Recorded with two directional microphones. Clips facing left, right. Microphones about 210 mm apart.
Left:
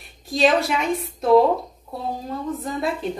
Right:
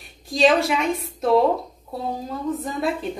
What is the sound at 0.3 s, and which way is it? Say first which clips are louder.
Speech: right 1 dB; centre (ahead or behind).